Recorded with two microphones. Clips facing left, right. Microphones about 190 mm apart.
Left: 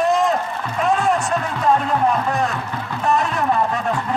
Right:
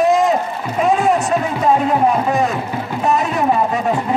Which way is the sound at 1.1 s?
15° right (ahead or behind).